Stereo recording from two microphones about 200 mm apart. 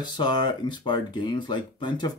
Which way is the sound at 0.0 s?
20° left (ahead or behind).